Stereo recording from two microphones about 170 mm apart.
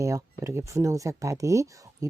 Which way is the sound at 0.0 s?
20° right (ahead or behind).